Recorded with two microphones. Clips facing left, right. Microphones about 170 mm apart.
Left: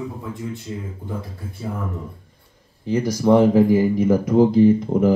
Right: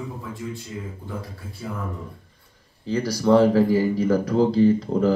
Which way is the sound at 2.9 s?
25° left (ahead or behind).